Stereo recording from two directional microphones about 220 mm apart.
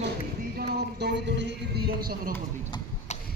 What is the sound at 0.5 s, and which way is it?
Music, 45° right (ahead or behind).